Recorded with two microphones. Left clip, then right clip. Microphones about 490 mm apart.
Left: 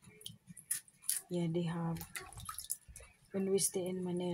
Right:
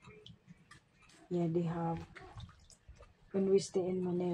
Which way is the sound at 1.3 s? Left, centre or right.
Left.